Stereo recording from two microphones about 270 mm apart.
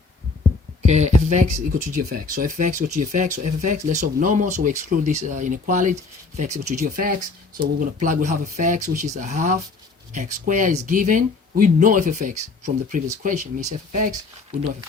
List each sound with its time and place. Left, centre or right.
0.9 s speech: right